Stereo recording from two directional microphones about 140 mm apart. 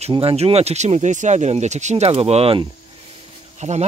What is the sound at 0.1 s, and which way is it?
Speech, 40° right (ahead or behind).